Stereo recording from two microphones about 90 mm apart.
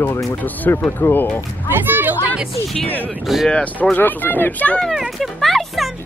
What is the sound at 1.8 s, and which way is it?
Music, 20° right (ahead or behind).